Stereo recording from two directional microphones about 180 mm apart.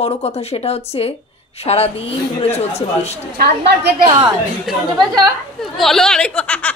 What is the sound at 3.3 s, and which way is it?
Speech, 65° right (ahead or behind).